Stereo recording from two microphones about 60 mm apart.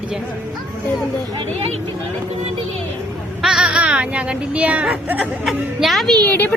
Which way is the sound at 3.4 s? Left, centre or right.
Centre.